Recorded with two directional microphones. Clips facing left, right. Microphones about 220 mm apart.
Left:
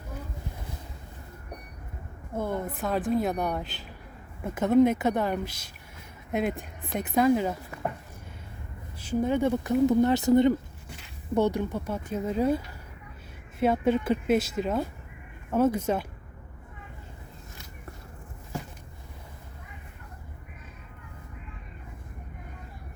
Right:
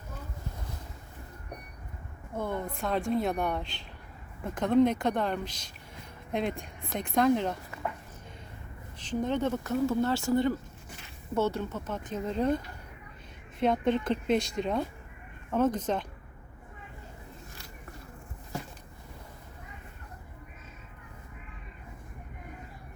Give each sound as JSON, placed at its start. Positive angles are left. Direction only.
{"t": 2.3, "sound": "speech", "side_deg": 5}
{"t": 9.0, "sound": "speech", "side_deg": 10}